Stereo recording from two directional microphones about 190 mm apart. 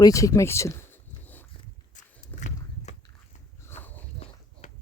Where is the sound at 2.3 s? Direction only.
10° left (ahead or behind).